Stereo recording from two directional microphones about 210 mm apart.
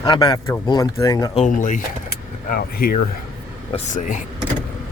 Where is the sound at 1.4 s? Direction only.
35° left (ahead or behind).